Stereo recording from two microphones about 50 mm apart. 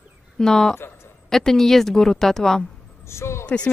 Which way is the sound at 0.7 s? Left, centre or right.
Left.